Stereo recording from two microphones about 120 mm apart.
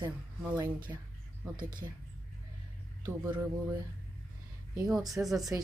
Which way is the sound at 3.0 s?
20° right (ahead or behind).